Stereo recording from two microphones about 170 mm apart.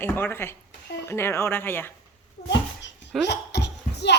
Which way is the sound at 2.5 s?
90° left.